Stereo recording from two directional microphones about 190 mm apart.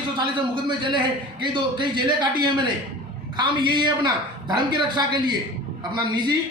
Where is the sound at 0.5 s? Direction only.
25° right (ahead or behind).